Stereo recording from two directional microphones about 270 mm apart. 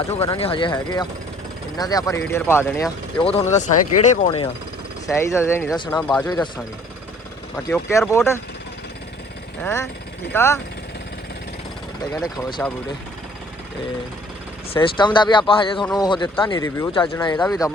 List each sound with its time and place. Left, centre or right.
0.1 s speech: left
5.0 s speech: centre
6.0 s speech: centre
6.2 s speech: centre
7.5 s speech: centre
9.6 s speech: centre
12.2 s speech: centre
14.7 s speech: centre